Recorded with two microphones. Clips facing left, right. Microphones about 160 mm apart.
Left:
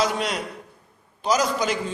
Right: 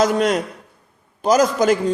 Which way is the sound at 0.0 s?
45° right (ahead or behind).